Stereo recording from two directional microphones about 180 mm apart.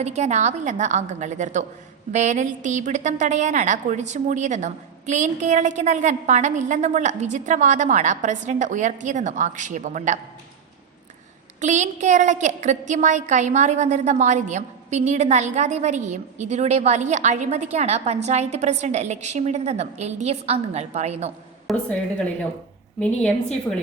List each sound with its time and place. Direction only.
0.0 s a woman's voice: 40° right (ahead or behind)
11.6 s a woman's voice: 40° right (ahead or behind)
21.7 s a woman's voice: 5° left (ahead or behind)